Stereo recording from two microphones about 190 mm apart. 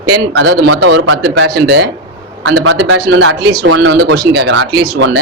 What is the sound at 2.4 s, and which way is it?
Speech, 75° right (ahead or behind).